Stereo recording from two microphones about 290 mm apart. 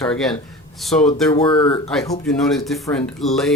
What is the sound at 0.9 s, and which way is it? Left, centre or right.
Speech, centre.